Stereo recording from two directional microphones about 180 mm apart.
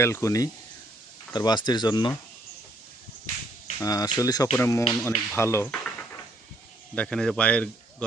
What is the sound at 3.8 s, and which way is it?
Speech, 20° left (ahead or behind).